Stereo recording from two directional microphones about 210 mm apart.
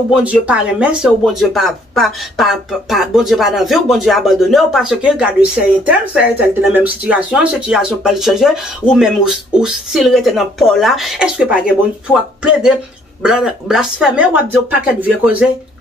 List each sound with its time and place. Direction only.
0.1 s speech: 5° right (ahead or behind)
13.2 s speech: 5° right (ahead or behind)